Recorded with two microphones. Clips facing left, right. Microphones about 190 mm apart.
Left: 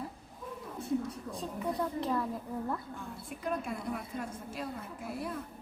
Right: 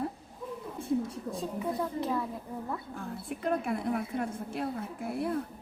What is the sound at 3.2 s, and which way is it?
A woman's voice, 60° right (ahead or behind).